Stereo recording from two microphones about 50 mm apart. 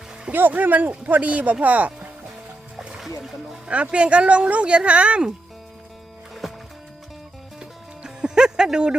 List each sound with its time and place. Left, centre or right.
0.3 s speech: right
2.7 s music: centre
3.2 s speech: centre
3.7 s speech: right
6.4 s music: centre
7.6 s music: centre